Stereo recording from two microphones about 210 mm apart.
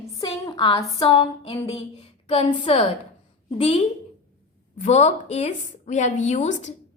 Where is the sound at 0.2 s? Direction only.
20° left (ahead or behind).